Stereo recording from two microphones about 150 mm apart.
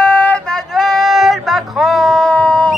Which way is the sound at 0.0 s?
10° left (ahead or behind).